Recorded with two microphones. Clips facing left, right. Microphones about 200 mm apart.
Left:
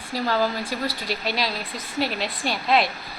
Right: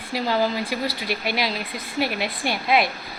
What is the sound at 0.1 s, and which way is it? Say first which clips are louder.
Speech: right 1 dB; 15° right (ahead or behind).